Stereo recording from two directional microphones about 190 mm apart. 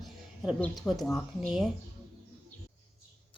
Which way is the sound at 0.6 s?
Centre (ahead or behind).